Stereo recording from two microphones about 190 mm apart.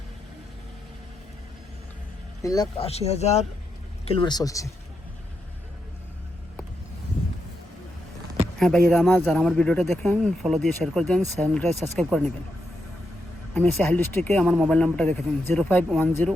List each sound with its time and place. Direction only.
2.4 s speech: 20° left (ahead or behind)
2.7 s speech: 30° left (ahead or behind); by 4.7 s 15° left (ahead or behind)
8.5 s speech: 5° left (ahead or behind)
13.5 s speech: 10° left (ahead or behind)